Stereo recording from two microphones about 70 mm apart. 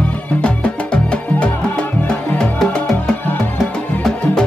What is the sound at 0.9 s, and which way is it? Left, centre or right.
Music, centre.